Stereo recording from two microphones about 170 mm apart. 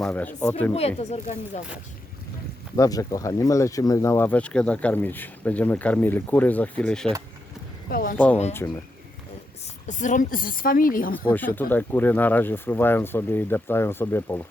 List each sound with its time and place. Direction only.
0.0 s speech: 10° left (ahead or behind)
0.7 s speech: 40° left (ahead or behind)
2.7 s speech: 20° left (ahead or behind)
7.9 s speech: 60° left (ahead or behind)
9.8 s a woman's voice: 45° left (ahead or behind)
11.1 s speech: 10° left (ahead or behind)